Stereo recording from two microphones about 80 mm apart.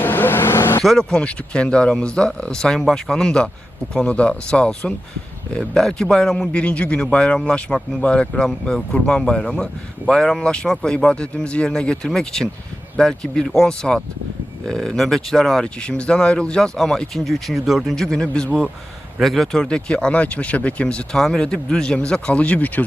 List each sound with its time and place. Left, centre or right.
0.0 s vehicle: left
0.8 s a man's voice: centre